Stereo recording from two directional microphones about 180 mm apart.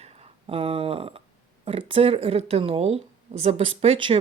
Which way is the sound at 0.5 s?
30° right (ahead or behind).